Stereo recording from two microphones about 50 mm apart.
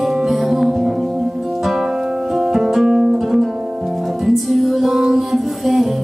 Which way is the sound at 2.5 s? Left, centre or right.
Centre.